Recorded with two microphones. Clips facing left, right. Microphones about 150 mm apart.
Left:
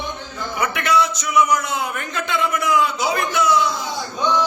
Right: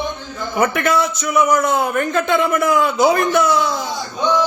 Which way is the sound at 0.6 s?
50° right (ahead or behind).